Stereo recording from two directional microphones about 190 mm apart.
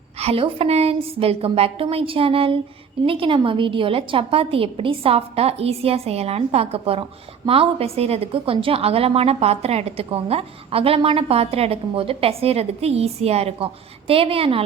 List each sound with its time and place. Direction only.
0.2 s a woman's voice: 30° right (ahead or behind)